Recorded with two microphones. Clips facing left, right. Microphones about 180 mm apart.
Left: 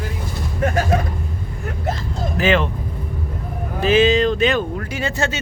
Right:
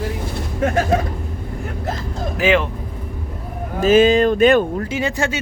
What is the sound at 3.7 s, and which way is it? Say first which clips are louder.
Speech: right 3 dB; 50° right (ahead or behind).